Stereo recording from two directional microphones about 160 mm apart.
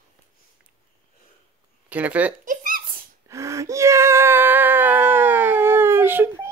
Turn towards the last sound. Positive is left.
turn(degrees=-15)  # may be behind; listen again after turning